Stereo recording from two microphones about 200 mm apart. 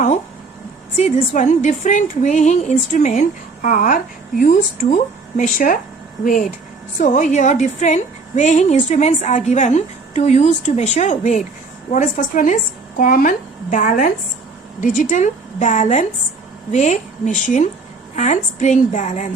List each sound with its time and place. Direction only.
0.9 s a woman's voice: 35° left (ahead or behind)